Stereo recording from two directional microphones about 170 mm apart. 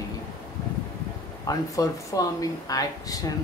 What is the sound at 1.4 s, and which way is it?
Speech, 20° left (ahead or behind).